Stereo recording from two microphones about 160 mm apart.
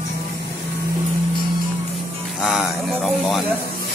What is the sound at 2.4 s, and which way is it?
Speech, 5° right (ahead or behind).